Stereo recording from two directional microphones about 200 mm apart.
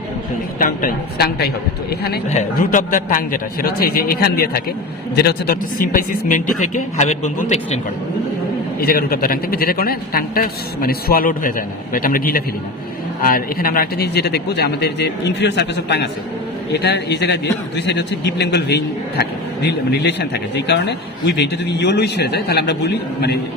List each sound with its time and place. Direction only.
0.6 s a man's voice: 45° left (ahead or behind)
8.8 s a man's voice: 50° left (ahead or behind)